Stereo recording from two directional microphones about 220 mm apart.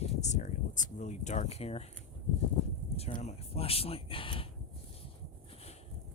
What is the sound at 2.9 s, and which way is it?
Speech, 30° left (ahead or behind).